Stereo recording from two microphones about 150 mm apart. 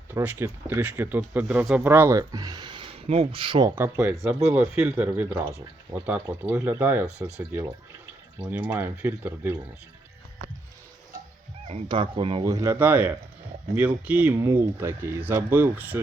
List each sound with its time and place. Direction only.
0.1 s speech: 15° right (ahead or behind); by 3.7 s 35° right (ahead or behind)
3.8 s speech: 15° right (ahead or behind)
4.1 s speech: centre (ahead or behind)
4.4 s speech: 15° right (ahead or behind)
8.4 s speech: 10° right (ahead or behind)
11.7 s speech: 35° right (ahead or behind)
12.5 s speech: 20° right (ahead or behind)